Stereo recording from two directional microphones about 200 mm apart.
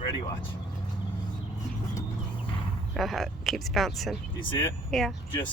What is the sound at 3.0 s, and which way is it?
Speech, centre (ahead or behind).